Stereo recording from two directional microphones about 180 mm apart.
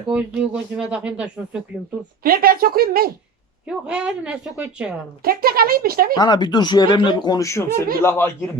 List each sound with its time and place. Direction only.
0.1 s speech: 5° right (ahead or behind)
2.2 s speech: 55° right (ahead or behind)
3.7 s speech: 5° right (ahead or behind)
5.2 s speech: 55° right (ahead or behind)
6.1 s speech: 20° left (ahead or behind)